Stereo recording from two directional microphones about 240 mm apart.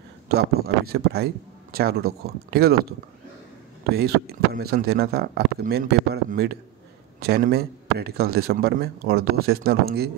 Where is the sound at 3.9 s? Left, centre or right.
Right.